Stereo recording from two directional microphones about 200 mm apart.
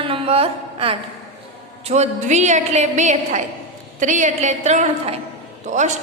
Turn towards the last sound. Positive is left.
turn(degrees=-40)  # may be behind; listen again after turning